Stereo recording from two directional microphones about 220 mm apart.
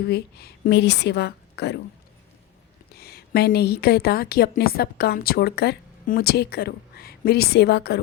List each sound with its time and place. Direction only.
0.0 s a woman's voice: 45° left (ahead or behind)
2.9 s a woman's voice: 45° left (ahead or behind)